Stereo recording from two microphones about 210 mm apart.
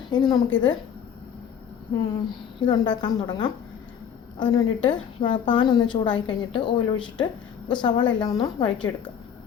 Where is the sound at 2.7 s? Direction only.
20° left (ahead or behind).